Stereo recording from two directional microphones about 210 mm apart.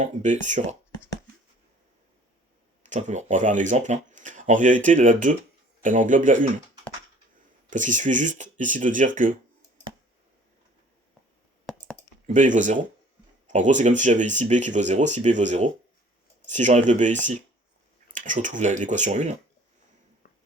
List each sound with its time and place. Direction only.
0.0 s speech: 35° right (ahead or behind)
2.8 s speech: 35° right (ahead or behind)
7.7 s speech: 35° right (ahead or behind)
12.2 s speech: 35° right (ahead or behind)
20.2 s a sound: 40° left (ahead or behind)